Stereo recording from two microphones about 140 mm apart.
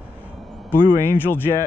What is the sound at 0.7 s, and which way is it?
Speech, 30° right (ahead or behind).